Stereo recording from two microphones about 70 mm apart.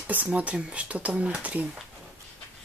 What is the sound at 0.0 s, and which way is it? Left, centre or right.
Speech, right.